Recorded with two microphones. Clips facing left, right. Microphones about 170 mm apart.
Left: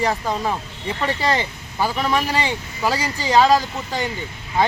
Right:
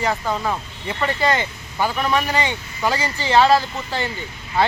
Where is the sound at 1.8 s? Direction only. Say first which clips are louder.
Even; 35° left (ahead or behind).